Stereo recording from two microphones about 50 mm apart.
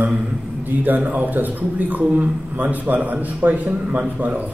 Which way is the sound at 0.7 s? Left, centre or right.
Right.